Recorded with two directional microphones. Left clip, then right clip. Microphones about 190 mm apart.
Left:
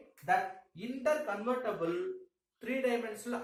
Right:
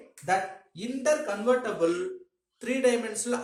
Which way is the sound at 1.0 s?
30° right (ahead or behind).